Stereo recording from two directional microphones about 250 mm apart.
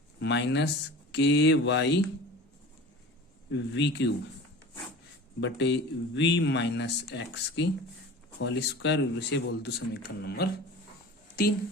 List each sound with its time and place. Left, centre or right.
0.2 s speech: left
3.5 s speech: left
5.4 s speech: left